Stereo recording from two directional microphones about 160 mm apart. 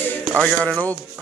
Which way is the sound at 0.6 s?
5° left (ahead or behind).